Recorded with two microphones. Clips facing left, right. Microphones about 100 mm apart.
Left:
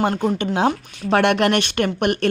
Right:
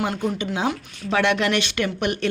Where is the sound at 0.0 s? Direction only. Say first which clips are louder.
Left 5 dB; 55° left (ahead or behind).